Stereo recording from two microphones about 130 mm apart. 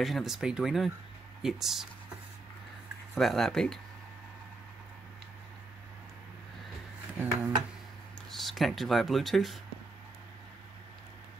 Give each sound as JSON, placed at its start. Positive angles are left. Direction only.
{"t": 0.0, "sound": "speech", "side_deg": 0}
{"t": 3.2, "sound": "speech", "side_deg": 0}
{"t": 7.2, "sound": "speech", "side_deg": -15}
{"t": 8.3, "sound": "speech", "side_deg": 0}